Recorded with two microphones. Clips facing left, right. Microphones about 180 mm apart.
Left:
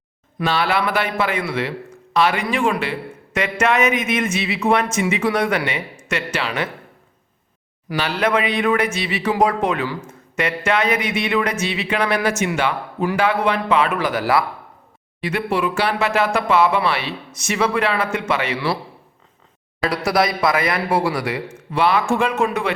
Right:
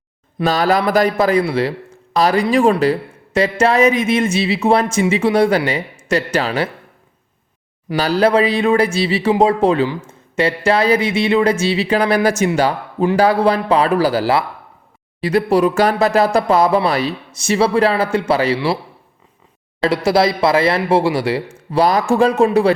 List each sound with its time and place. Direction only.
0.3 s speech: 40° right (ahead or behind)
7.9 s speech: 35° right (ahead or behind)
19.8 s speech: 25° right (ahead or behind)